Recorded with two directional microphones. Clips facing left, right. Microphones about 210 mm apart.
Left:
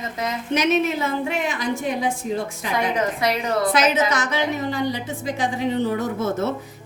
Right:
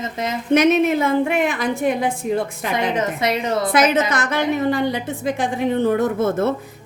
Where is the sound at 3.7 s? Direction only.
55° right (ahead or behind).